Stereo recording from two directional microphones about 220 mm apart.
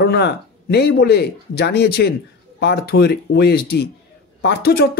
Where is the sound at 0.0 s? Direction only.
50° left (ahead or behind).